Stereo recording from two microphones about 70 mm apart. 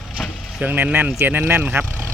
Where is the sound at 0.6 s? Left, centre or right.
Right.